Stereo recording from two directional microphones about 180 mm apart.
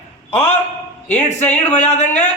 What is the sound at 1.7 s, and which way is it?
Speech, 40° left (ahead or behind).